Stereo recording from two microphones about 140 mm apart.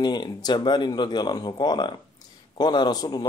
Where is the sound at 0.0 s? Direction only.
30° left (ahead or behind).